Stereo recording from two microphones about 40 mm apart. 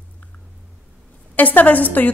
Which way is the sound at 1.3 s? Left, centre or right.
Left.